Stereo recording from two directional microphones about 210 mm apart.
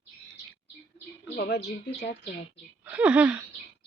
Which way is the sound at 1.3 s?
55° left (ahead or behind).